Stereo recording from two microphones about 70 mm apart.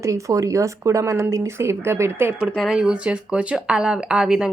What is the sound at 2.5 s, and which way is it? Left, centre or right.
Speech, centre.